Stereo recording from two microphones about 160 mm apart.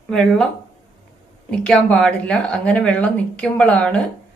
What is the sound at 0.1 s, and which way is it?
Speech, 5° left (ahead or behind).